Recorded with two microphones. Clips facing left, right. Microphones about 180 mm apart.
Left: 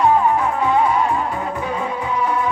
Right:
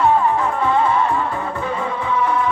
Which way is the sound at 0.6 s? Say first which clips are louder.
Even; 15° left (ahead or behind).